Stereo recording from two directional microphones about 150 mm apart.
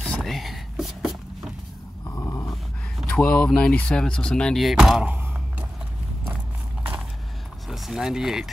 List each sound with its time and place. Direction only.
0.0 s whispering: 5° left (ahead or behind)
2.0 s dog: 20° left (ahead or behind)
3.0 s speech: 5° left (ahead or behind); by 5.7 s 10° right (ahead or behind)
7.6 s speech: centre (ahead or behind)